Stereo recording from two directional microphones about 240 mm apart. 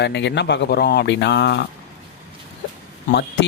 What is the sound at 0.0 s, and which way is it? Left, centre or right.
Speech, left.